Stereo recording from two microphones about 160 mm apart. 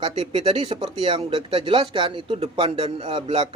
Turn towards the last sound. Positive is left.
turn(degrees=-35)  # may be behind; listen again after turning